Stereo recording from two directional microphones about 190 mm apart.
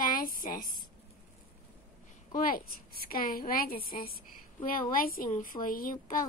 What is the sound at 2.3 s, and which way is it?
A woman's voice, 45° left (ahead or behind).